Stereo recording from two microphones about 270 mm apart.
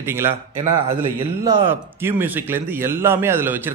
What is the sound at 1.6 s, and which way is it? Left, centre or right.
A man's voice, centre.